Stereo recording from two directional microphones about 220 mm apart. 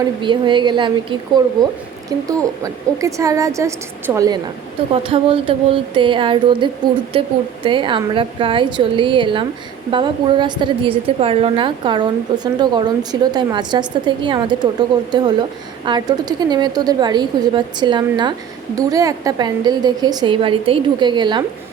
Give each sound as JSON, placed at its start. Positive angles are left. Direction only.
{"t": 0.2, "sound": "a woman's voice", "side_deg": -20}
{"t": 2.6, "sound": "a woman's voice", "side_deg": -15}
{"t": 5.0, "sound": "a woman's voice", "side_deg": -25}